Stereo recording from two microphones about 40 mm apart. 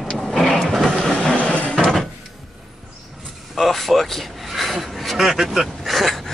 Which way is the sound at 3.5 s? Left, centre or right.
Centre.